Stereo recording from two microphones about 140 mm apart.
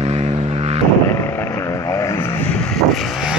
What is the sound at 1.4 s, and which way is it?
Vehicle, 20° left (ahead or behind).